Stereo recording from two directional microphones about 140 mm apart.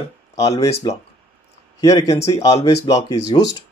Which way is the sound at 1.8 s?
25° left (ahead or behind).